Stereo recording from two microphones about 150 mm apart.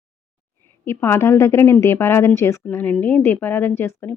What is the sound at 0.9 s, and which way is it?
Speech, 15° left (ahead or behind).